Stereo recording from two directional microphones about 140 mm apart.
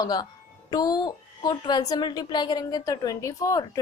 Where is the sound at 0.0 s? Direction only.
30° left (ahead or behind).